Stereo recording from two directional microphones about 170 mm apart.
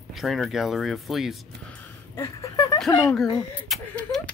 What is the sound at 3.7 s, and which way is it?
Speech, 5° left (ahead or behind).